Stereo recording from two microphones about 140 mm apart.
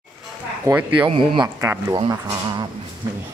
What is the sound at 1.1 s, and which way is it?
Speech, 35° right (ahead or behind).